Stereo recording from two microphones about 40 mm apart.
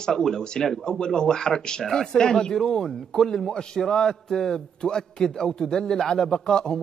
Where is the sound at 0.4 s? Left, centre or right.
Centre.